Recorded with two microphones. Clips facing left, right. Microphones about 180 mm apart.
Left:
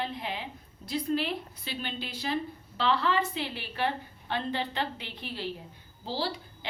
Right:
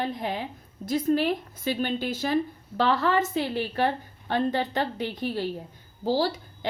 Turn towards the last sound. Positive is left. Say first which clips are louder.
# right 7 dB
turn(degrees=-45)  # may be behind; listen again after turning